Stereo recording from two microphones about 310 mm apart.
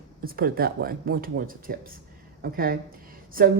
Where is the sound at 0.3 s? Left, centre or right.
Right.